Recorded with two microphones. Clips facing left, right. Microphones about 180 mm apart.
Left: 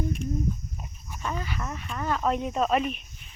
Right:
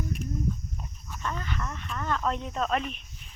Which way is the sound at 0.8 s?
15° left (ahead or behind).